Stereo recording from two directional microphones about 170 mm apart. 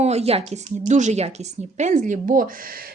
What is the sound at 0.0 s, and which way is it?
A woman's voice, 40° right (ahead or behind).